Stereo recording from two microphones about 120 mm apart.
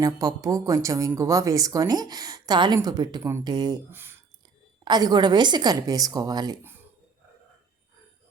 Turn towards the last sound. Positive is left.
turn(degrees=-35)  # may be behind; listen again after turning